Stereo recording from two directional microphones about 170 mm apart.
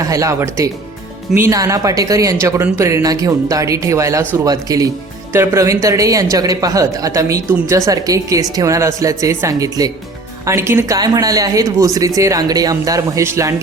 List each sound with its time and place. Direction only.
0.0 s a man's voice: 20° right (ahead or behind)